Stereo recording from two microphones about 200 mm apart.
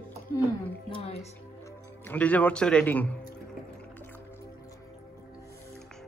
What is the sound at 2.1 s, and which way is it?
A man's voice, 10° left (ahead or behind).